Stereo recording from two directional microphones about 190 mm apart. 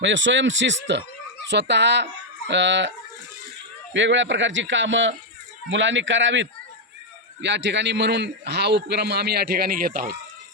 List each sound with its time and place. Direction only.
0.0 s a man's voice: 80° right
3.9 s a man's voice: 75° right (ahead or behind); by 10.2 s 45° right (ahead or behind)